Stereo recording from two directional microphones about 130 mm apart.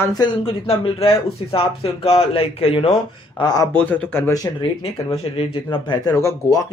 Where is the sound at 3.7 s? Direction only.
10° left (ahead or behind).